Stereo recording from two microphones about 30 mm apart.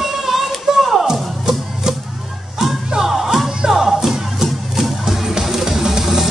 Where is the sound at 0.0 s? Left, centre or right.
Centre.